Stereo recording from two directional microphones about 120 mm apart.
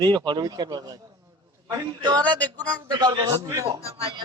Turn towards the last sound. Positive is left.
turn(degrees=-25)  # may be behind; listen again after turning